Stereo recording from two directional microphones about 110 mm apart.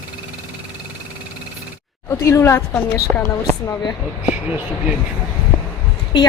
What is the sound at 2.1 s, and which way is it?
A woman's voice, 25° left (ahead or behind).